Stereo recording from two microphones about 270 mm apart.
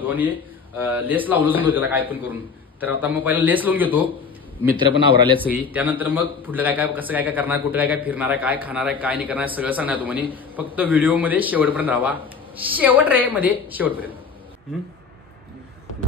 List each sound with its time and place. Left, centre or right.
0.0 s a man's voice: centre
4.7 s a man's voice: centre
5.4 s a man's voice: centre